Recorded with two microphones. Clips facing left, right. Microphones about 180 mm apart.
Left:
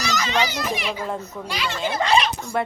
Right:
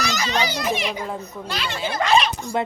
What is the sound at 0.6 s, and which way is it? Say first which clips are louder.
Speech: right 2 dB; 25° right (ahead or behind).